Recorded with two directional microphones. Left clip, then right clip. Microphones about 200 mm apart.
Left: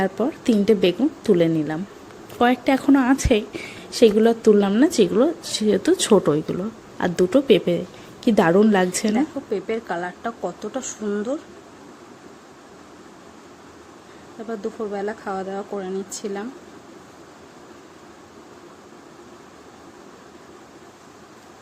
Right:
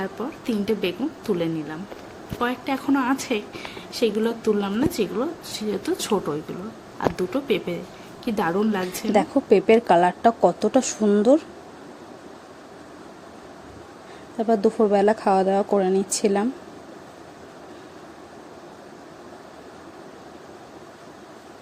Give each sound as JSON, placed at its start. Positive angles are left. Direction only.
{"t": 0.0, "sound": "a woman's voice", "side_deg": 25}
{"t": 9.5, "sound": "speech", "side_deg": -35}
{"t": 14.5, "sound": "speech", "side_deg": -35}